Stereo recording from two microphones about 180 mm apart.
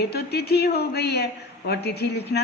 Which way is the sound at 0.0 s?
65° left (ahead or behind).